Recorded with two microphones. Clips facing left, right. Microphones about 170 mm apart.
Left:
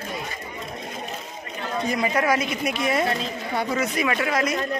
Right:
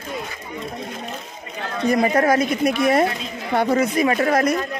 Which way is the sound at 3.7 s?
40° right (ahead or behind).